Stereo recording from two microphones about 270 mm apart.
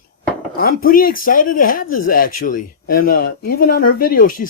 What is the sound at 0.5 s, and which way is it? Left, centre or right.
Speech, left.